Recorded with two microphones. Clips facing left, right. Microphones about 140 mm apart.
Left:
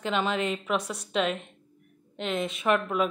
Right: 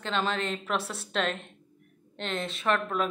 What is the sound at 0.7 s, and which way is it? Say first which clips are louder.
A woman's voice: left 2 dB; centre (ahead or behind).